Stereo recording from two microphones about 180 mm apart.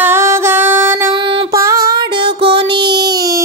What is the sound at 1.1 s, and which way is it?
Music, 30° right (ahead or behind).